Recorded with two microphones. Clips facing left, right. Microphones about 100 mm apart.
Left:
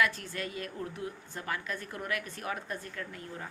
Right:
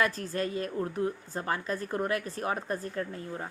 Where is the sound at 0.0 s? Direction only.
40° right (ahead or behind).